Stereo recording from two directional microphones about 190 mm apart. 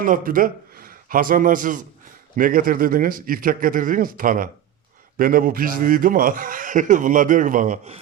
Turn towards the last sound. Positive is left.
turn(degrees=-40)  # may be behind; listen again after turning